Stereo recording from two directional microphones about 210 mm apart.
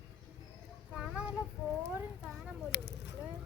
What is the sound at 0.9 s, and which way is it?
Child singing, 5° right (ahead or behind).